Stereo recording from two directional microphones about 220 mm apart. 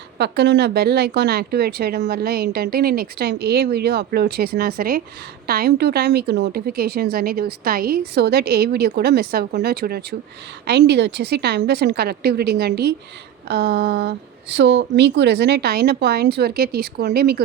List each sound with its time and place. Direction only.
0.2 s speech: 50° right (ahead or behind)